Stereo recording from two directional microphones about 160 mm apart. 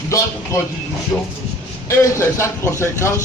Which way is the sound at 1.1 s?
10° left (ahead or behind).